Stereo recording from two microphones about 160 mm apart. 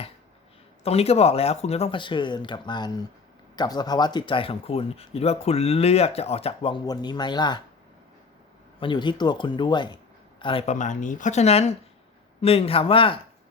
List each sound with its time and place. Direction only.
0.9 s speech: 40° left (ahead or behind)
8.8 s speech: 30° left (ahead or behind)